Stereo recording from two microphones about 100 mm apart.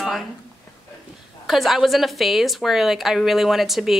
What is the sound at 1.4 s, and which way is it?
A woman's voice, centre (ahead or behind).